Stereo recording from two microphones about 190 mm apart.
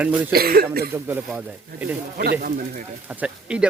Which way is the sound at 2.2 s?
55° right (ahead or behind).